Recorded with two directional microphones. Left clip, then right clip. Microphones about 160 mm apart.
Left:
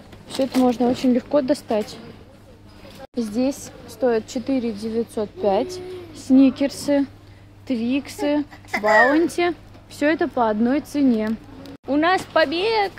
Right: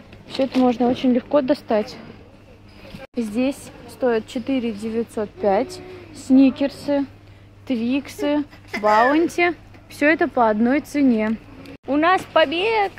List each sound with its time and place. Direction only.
0.3 s speech: 10° left (ahead or behind)
4.0 s speech: 10° left (ahead or behind)
6.7 s speech: 25° left (ahead or behind)
7.6 s speech: centre (ahead or behind)
8.7 s speech: 40° left (ahead or behind)
9.1 s speech: 10° left (ahead or behind)
11.9 s speech: 15° left (ahead or behind)